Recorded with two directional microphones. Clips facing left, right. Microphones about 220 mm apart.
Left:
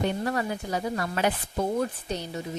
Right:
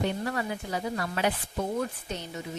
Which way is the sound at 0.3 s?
40° left (ahead or behind).